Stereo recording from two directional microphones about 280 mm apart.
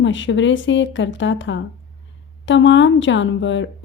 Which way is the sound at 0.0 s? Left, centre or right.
Left.